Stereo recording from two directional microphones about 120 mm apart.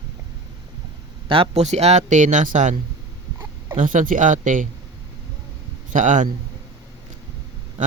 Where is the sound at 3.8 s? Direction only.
90° right.